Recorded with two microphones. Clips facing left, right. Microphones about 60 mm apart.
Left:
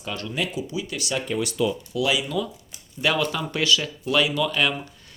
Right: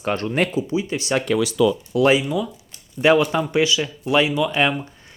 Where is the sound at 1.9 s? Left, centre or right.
Right.